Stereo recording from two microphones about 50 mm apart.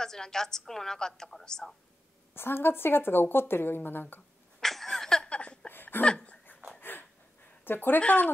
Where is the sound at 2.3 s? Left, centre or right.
Left.